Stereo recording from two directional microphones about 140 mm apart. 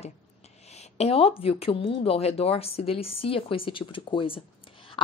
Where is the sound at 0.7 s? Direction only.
50° left (ahead or behind).